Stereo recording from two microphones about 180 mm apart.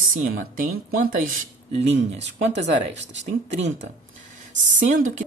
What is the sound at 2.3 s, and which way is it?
Speech, 75° right (ahead or behind).